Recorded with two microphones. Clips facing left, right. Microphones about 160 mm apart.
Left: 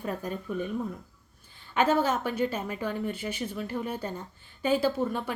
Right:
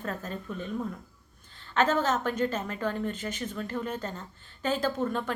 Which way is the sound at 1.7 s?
10° left (ahead or behind).